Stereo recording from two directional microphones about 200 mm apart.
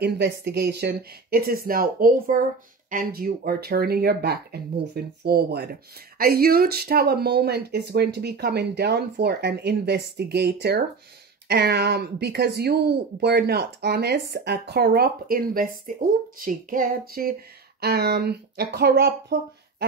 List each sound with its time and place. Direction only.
0.0 s speech: 55° right (ahead or behind)